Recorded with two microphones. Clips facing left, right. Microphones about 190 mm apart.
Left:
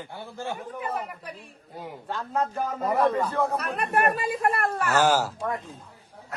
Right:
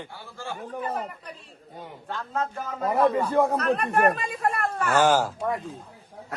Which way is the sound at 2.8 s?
5° right (ahead or behind).